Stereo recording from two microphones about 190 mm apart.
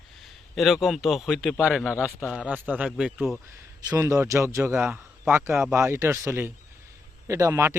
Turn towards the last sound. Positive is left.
turn(degrees=-15)  # may be behind; listen again after turning